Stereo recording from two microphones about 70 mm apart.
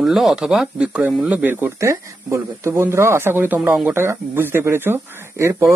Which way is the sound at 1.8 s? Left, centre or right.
Right.